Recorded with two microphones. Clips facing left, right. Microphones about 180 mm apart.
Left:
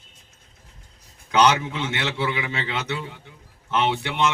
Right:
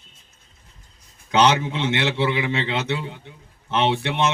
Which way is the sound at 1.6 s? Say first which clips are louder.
Right 4 dB; 25° right (ahead or behind).